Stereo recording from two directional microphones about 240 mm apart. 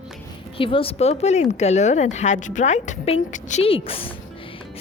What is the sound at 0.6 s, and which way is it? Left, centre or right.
A woman's voice, left.